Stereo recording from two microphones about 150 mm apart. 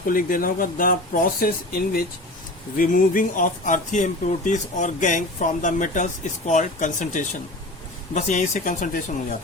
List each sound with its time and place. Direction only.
0.0 s speech: 70° left (ahead or behind)
2.7 s speech: 65° left (ahead or behind)